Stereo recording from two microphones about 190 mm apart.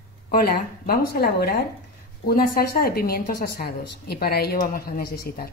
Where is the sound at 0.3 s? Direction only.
50° left (ahead or behind).